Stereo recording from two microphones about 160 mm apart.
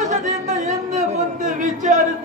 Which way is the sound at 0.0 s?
50° right (ahead or behind).